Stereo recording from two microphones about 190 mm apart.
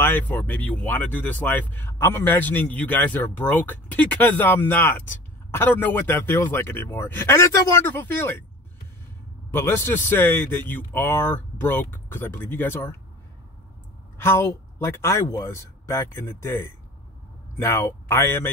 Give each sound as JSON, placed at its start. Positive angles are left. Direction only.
{"t": 0.0, "sound": "speech", "side_deg": 10}
{"t": 9.5, "sound": "speech", "side_deg": 15}
{"t": 14.1, "sound": "speech", "side_deg": 15}